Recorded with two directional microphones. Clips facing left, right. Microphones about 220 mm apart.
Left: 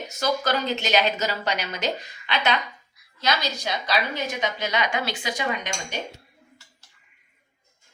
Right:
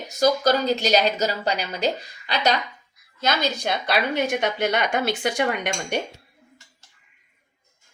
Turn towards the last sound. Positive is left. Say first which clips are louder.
# right 5 dB
turn(degrees=-60)  # may be behind; listen again after turning